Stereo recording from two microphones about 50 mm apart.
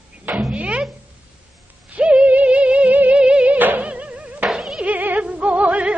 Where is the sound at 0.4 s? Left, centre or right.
Right.